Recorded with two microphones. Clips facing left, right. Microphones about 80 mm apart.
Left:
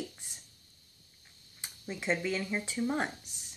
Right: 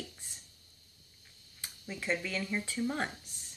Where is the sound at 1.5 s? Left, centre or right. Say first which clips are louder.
Left 2 dB; left.